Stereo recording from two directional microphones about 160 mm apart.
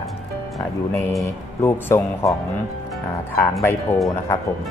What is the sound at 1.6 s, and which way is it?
Speech, 15° left (ahead or behind).